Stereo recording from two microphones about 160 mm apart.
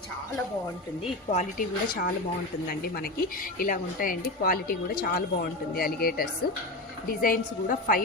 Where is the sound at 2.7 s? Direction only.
70° left (ahead or behind).